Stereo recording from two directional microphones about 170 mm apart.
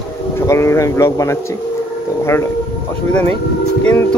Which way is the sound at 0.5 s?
15° left (ahead or behind).